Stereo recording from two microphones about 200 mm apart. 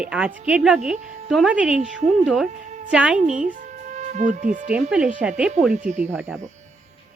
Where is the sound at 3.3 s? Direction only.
40° right (ahead or behind).